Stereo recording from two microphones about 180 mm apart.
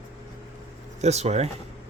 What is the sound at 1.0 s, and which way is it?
Speech, 35° right (ahead or behind).